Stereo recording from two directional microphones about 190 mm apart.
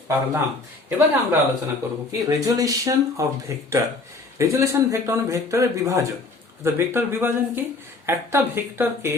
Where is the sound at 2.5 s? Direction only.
20° right (ahead or behind).